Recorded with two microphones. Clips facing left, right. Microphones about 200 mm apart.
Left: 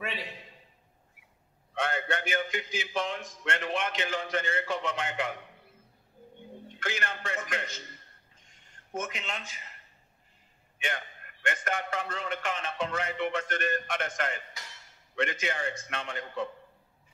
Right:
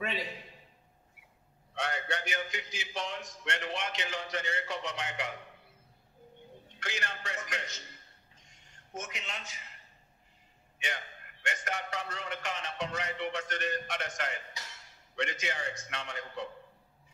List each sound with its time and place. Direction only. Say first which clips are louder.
1.8 s a man's voice: left 4 dB; 55° left (ahead or behind)
6.8 s music: left 5 dB; 55° left (ahead or behind)
8.5 s a sound: left 7 dB; 55° left (ahead or behind)
11.4 s a man's voice: left 5 dB; 55° left (ahead or behind)